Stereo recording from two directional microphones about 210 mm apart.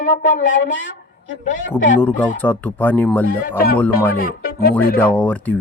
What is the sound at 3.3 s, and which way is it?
Speech, 45° left (ahead or behind).